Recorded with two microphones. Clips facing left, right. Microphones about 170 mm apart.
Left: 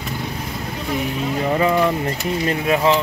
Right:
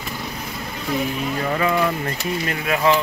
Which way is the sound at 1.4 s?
20° left (ahead or behind).